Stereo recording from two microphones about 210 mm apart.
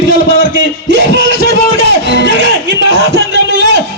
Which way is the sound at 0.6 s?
60° right (ahead or behind).